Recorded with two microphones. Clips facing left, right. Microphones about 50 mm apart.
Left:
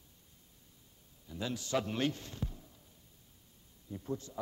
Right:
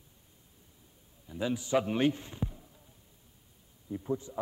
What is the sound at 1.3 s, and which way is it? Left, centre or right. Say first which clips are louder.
A man's voice: right 6 dB; centre.